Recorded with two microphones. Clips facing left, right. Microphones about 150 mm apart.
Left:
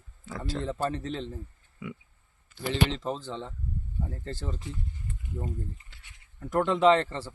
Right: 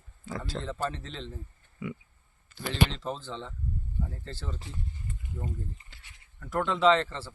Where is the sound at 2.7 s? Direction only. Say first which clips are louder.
Left 1 dB; 15° left (ahead or behind).